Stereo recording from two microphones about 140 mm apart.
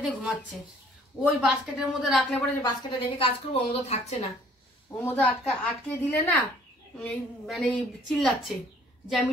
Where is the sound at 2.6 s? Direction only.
35° left (ahead or behind).